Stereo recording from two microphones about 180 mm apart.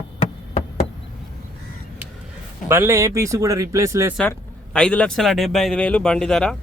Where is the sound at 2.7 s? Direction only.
15° right (ahead or behind).